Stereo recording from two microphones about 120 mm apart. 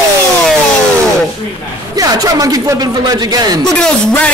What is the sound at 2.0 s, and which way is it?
Speech, 30° right (ahead or behind).